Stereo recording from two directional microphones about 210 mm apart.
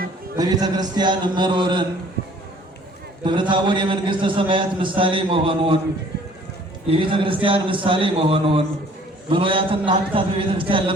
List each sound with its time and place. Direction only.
0.3 s a man's voice: 20° right (ahead or behind)
3.2 s a man's voice: 20° right (ahead or behind)
6.9 s a man's voice: 25° right (ahead or behind)